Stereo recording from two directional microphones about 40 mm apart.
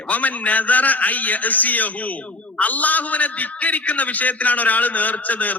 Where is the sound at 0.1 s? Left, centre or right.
Left.